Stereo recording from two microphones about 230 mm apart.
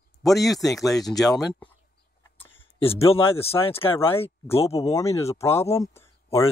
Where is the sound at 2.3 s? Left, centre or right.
Centre.